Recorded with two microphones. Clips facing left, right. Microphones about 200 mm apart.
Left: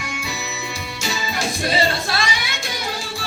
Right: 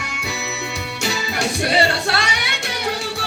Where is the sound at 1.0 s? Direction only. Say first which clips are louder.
Right 2 dB; 65° right (ahead or behind).